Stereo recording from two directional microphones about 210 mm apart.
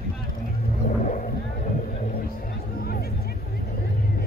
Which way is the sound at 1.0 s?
40° left (ahead or behind).